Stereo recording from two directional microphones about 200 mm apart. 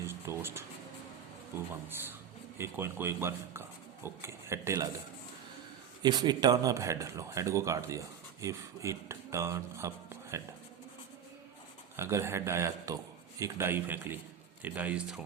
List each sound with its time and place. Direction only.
0.0 s a sound: 15° right (ahead or behind)
2.6 s speech: 10° right (ahead or behind)
6.0 s speech: 20° right (ahead or behind)
11.9 s speech: 15° right (ahead or behind)